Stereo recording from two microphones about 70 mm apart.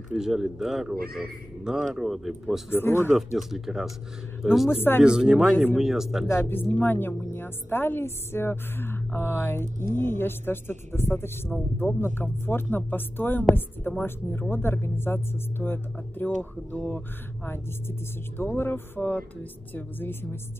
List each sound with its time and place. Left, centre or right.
0.1 s speech: centre
2.7 s a woman's voice: left
3.3 s speech: centre
4.6 s a woman's voice: left
5.0 s speech: centre
6.2 s a woman's voice: left
18.4 s a woman's voice: left
18.9 s speech: left